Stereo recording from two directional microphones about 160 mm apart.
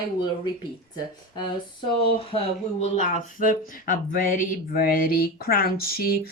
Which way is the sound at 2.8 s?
50° left (ahead or behind).